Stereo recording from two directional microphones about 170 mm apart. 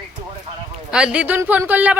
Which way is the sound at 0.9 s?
5° right (ahead or behind).